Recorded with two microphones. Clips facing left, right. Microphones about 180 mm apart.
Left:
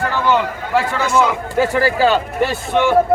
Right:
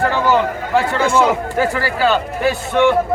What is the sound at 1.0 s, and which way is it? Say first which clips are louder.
Speech: right 2 dB; 35° right (ahead or behind).